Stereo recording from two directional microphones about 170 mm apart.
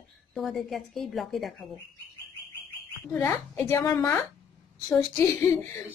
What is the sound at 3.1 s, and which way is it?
A woman's voice, 15° left (ahead or behind).